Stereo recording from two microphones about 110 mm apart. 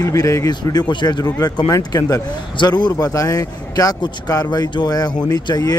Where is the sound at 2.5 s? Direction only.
45° left (ahead or behind).